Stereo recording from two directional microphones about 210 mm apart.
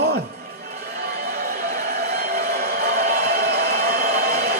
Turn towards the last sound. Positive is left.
turn(degrees=-50)  # may be behind; listen again after turning